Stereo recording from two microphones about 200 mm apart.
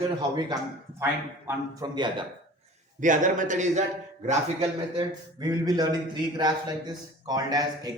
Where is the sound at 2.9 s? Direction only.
40° right (ahead or behind).